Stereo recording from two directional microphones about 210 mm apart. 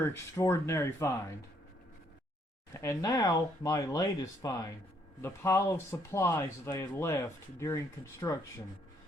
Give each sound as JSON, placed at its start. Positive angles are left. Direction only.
{"t": 0.0, "sound": "speech", "side_deg": 10}
{"t": 2.7, "sound": "speech", "side_deg": 15}